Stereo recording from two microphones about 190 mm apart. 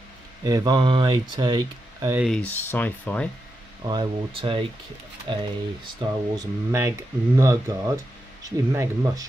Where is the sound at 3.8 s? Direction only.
25° right (ahead or behind).